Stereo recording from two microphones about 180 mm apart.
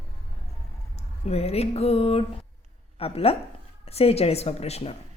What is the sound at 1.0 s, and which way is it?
Speech, 35° left (ahead or behind).